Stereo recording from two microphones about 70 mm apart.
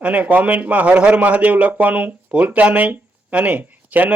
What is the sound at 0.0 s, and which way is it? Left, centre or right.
Speech, right.